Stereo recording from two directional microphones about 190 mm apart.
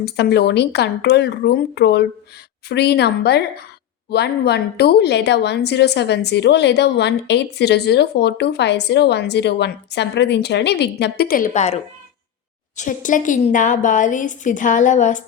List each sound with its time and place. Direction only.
0.0 s a woman's voice: 60° left (ahead or behind); by 15.2 s 40° left (ahead or behind)